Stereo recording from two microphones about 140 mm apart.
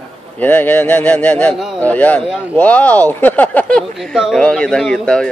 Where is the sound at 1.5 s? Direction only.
5° right (ahead or behind).